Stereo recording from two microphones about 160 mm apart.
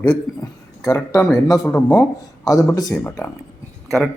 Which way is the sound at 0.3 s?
20° left (ahead or behind).